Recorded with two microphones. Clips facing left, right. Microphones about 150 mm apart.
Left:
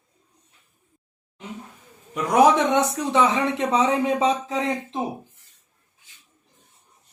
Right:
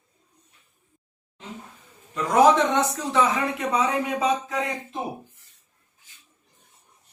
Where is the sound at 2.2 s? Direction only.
15° left (ahead or behind).